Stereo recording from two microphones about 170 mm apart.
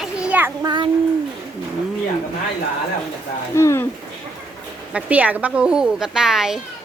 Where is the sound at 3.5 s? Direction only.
15° left (ahead or behind).